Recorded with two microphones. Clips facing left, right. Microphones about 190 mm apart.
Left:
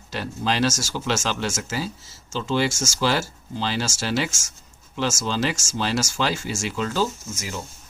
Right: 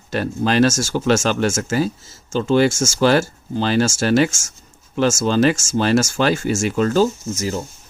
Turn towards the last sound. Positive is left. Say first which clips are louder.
# right 9 dB
turn(degrees=-40)  # may be behind; listen again after turning